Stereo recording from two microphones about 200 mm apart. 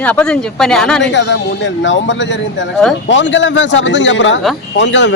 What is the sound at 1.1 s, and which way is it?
A man's voice, 60° left (ahead or behind).